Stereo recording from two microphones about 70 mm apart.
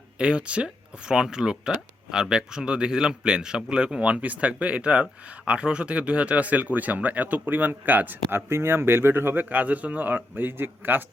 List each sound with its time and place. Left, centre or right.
0.2 s speech: centre; by 11.0 s right